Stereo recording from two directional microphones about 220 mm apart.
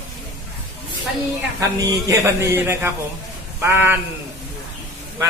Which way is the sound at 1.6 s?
15° right (ahead or behind).